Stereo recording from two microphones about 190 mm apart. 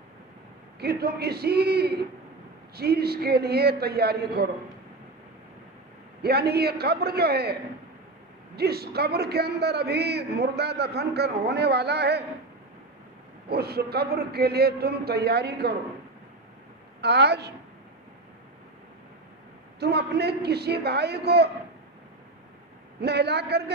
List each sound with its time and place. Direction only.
0.7 s a man's voice: 55° right (ahead or behind)
6.2 s a man's voice: 55° right (ahead or behind)
8.5 s a man's voice: 55° right (ahead or behind)
13.5 s a man's voice: 55° right (ahead or behind)
17.0 s a man's voice: 60° right (ahead or behind)
19.8 s a man's voice: 60° right (ahead or behind)
22.9 s a man's voice: 60° right (ahead or behind)